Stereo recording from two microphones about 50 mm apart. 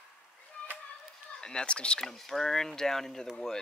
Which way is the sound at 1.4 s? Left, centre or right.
Centre.